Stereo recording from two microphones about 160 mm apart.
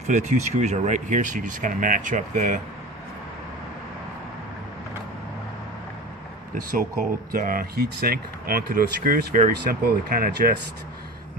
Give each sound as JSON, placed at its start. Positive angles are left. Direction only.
{"t": 0.1, "sound": "speech", "side_deg": -45}
{"t": 6.5, "sound": "speech", "side_deg": -60}